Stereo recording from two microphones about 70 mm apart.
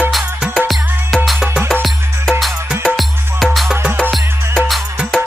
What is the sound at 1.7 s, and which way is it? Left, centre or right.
Music, centre.